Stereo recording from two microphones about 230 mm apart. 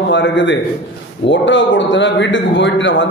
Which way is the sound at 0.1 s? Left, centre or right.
Left.